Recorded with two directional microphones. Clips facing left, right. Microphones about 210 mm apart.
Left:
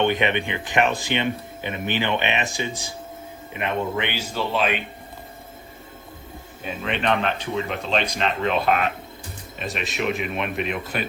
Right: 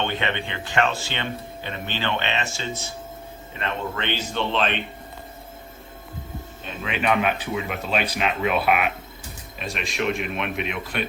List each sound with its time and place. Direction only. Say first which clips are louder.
0.0 s speech: left 5 dB; 15° left (ahead or behind)
6.7 s a man's voice: left 1 dB; centre (ahead or behind)